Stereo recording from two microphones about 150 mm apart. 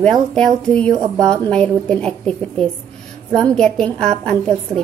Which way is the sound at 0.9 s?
25° right (ahead or behind).